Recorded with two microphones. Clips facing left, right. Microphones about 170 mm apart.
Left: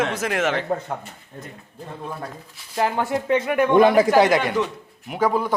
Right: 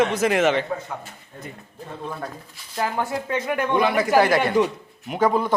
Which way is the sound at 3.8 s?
40° left (ahead or behind).